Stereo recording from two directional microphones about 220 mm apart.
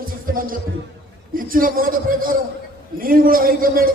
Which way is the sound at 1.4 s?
40° right (ahead or behind).